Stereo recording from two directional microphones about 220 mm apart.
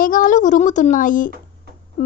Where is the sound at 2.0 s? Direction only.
35° left (ahead or behind).